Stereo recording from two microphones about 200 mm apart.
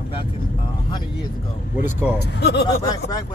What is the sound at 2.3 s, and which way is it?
Speech, 55° left (ahead or behind).